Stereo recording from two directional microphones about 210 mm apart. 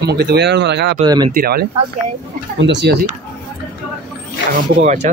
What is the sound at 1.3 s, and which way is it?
A man's voice, 45° right (ahead or behind).